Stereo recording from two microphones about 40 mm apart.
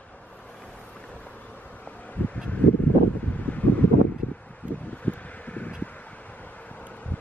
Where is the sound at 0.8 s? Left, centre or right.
Left.